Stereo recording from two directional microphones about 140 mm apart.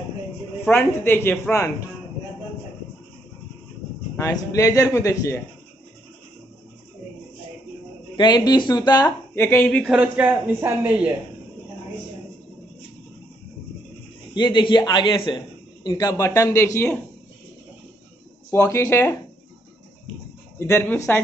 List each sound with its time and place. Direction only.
0.7 s a woman's voice: 15° left (ahead or behind)
4.2 s speech: 25° left (ahead or behind)
8.2 s speech: 30° left (ahead or behind)
9.3 s speech: 15° left (ahead or behind)
9.7 s speech: 5° left (ahead or behind)
9.9 s speech: 10° right (ahead or behind)
14.3 s a man's voice: 30° left (ahead or behind)
18.5 s a woman's voice: 20° left (ahead or behind)
20.5 s a woman's voice: 15° left (ahead or behind)